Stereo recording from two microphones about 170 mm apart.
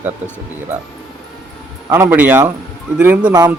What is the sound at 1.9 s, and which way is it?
Speech, 15° right (ahead or behind).